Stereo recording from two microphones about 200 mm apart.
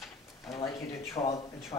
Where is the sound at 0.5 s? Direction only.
20° left (ahead or behind).